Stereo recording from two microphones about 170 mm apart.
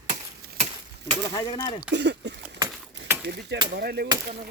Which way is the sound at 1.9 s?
90° right.